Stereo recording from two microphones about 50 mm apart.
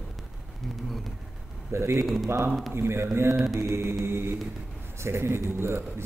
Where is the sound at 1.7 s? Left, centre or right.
Right.